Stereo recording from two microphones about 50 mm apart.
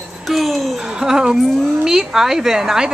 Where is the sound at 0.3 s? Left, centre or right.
Centre.